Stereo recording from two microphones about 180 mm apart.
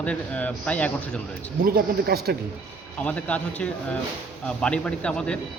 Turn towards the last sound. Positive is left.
turn(degrees=5)  # may be behind; listen again after turning